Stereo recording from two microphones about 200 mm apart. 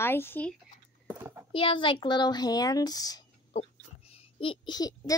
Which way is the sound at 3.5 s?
30° left (ahead or behind).